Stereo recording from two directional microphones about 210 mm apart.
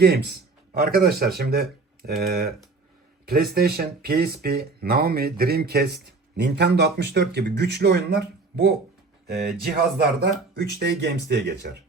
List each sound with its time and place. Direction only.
0.0 s speech: 50° right (ahead or behind)
3.5 s speech: 45° right (ahead or behind)